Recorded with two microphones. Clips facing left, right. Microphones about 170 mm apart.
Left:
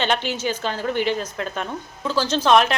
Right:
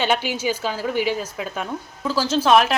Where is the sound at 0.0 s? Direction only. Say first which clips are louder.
Right 1 dB; 10° right (ahead or behind).